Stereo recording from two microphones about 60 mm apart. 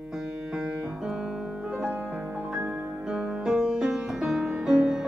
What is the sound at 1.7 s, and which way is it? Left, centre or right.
Music, centre.